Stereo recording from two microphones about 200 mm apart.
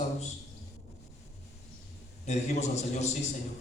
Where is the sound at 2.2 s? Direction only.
35° left (ahead or behind).